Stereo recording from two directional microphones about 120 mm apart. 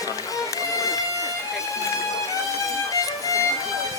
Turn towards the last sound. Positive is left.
turn(degrees=25)  # may be behind; listen again after turning